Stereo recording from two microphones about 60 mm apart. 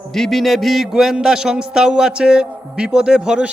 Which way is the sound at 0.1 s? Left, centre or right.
Centre.